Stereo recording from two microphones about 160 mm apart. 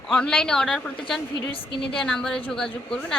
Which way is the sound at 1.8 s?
5° left (ahead or behind).